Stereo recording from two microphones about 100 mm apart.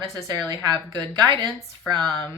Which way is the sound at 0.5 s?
45° right (ahead or behind).